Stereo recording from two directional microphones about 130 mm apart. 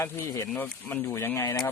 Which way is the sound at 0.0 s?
20° left (ahead or behind).